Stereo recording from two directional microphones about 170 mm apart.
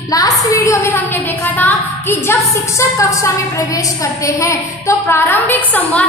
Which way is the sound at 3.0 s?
20° left (ahead or behind).